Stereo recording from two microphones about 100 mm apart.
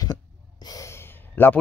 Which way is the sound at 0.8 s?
25° left (ahead or behind).